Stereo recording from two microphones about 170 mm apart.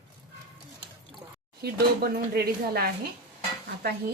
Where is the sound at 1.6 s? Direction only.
65° right (ahead or behind).